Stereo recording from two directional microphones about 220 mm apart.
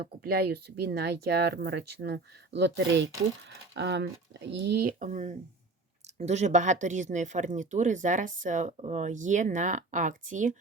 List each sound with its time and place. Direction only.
0.0 s speech: 45° right (ahead or behind)